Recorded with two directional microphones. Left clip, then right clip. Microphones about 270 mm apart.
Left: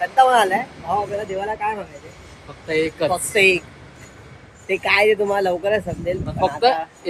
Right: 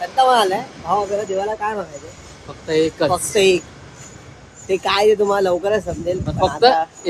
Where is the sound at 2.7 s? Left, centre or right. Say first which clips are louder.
Right 3 dB; centre.